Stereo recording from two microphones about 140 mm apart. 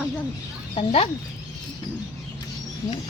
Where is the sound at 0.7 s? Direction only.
40° left (ahead or behind).